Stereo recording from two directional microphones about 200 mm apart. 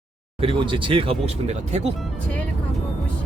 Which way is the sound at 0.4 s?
25° right (ahead or behind).